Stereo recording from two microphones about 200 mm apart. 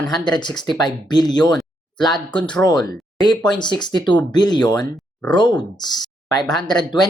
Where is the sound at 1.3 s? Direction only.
20° left (ahead or behind).